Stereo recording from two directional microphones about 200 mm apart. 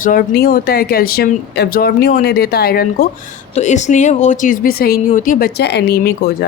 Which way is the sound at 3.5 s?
35° left (ahead or behind).